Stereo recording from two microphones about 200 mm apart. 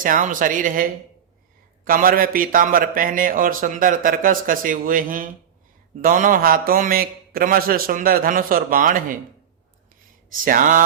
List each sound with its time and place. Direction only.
0.0 s a man's voice: 40° right (ahead or behind)
10.4 s a man's voice: 45° right (ahead or behind)